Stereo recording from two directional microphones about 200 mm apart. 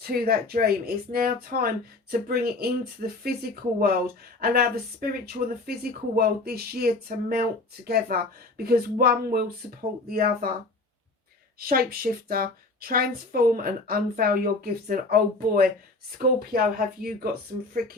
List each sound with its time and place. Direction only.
0.0 s a woman's voice: 50° right (ahead or behind)
11.6 s a woman's voice: 50° right (ahead or behind)